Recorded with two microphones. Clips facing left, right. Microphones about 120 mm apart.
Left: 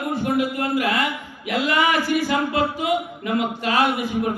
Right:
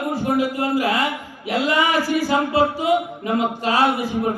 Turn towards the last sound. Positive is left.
turn(degrees=-35)  # may be behind; listen again after turning